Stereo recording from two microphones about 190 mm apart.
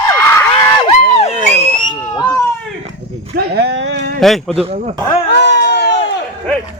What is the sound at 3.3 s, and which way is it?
Speech, 65° right (ahead or behind).